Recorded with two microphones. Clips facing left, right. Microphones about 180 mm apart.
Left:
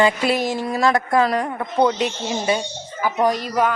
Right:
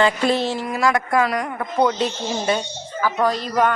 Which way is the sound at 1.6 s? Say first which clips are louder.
Even; 20° left (ahead or behind).